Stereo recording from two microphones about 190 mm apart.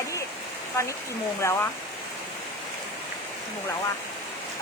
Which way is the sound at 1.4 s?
15° left (ahead or behind).